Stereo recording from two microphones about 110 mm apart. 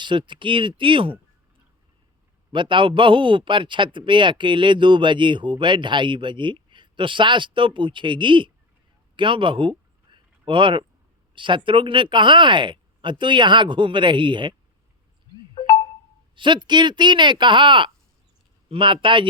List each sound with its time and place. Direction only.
0.0 s a man's voice: 45° right (ahead or behind)
2.5 s a man's voice: 45° right (ahead or behind)
9.1 s a sound: 50° right (ahead or behind)
11.3 s a man's voice: 50° right (ahead or behind)
15.5 s chime: 35° left (ahead or behind)
16.3 s a man's voice: 45° right (ahead or behind)